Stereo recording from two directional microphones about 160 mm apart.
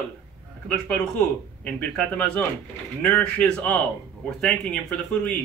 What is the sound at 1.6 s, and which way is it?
Speech, 10° left (ahead or behind).